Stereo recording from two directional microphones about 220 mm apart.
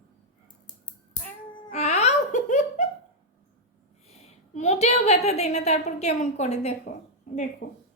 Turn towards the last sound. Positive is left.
turn(degrees=45)  # may be behind; listen again after turning